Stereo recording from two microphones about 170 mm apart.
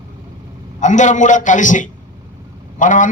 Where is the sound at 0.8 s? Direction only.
45° left (ahead or behind).